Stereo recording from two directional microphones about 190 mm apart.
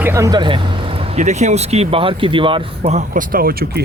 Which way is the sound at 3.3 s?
50° right (ahead or behind).